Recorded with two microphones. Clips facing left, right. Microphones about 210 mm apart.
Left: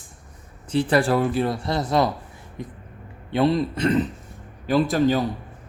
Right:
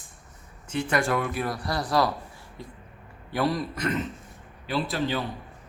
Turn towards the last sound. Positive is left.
turn(degrees=45)  # may be behind; listen again after turning